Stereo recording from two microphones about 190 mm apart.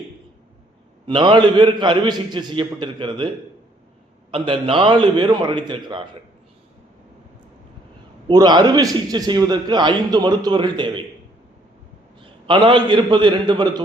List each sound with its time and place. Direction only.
1.0 s a man's voice: 25° right (ahead or behind)
4.3 s a man's voice: 30° right (ahead or behind)
8.3 s a man's voice: 20° right (ahead or behind)
12.2 s a man's voice: 25° right (ahead or behind)